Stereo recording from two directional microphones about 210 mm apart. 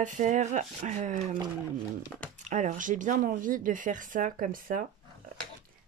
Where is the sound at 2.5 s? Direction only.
35° right (ahead or behind).